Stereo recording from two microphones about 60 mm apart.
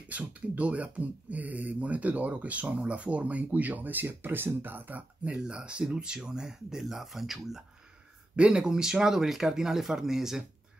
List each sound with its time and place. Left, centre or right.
0.1 s speech: right
5.3 s speech: centre
8.4 s speech: centre